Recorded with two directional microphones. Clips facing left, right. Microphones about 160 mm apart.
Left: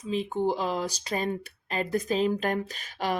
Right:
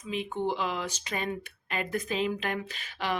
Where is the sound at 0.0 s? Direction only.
35° left (ahead or behind).